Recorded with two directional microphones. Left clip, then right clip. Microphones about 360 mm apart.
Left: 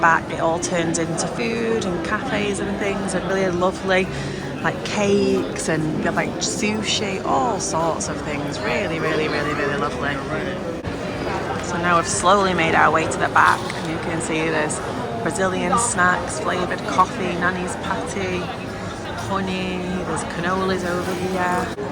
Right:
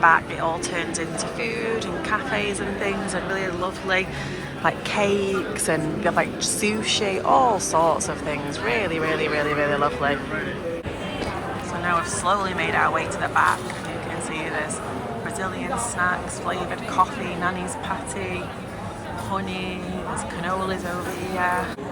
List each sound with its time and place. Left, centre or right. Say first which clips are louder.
0.0 s a woman's voice: left 1 dB; centre
11.9 s speech: left 5 dB; centre
16.0 s speech: left 5 dB; centre
20.4 s speech: left 4 dB; centre